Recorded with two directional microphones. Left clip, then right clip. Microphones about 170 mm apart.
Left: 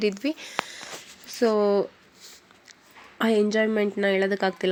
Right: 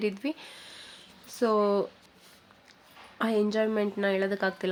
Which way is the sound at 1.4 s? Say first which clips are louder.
Left 4 dB; 10° left (ahead or behind).